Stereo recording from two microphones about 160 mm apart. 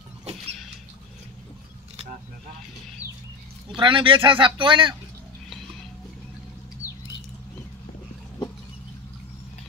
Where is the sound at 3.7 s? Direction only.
30° right (ahead or behind).